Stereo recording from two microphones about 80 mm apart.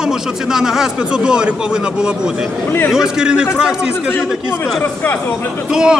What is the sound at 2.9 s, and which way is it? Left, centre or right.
Speech, centre.